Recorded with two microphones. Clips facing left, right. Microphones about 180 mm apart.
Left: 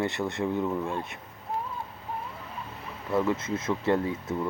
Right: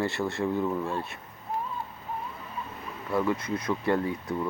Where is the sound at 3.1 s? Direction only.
25° left (ahead or behind).